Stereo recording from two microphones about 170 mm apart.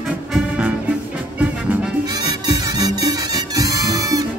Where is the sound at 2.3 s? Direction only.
20° right (ahead or behind).